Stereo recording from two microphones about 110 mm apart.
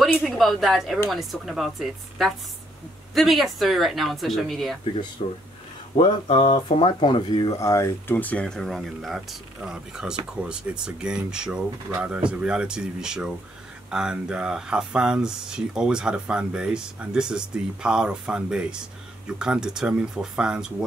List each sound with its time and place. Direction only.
0.4 s speech: centre (ahead or behind)
5.2 s speech: 70° left (ahead or behind)
6.2 s speech: 55° left (ahead or behind); by 8.2 s 25° left (ahead or behind)
8.2 s speech: 15° left (ahead or behind)
8.5 s speech: centre (ahead or behind)